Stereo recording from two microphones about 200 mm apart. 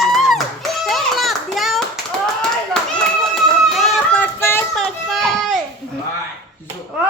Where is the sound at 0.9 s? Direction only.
Centre (ahead or behind).